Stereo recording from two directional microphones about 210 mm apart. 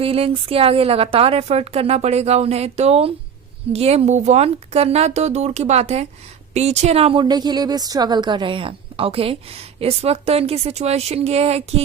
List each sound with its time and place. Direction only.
0.0 s a woman's voice: 25° right (ahead or behind)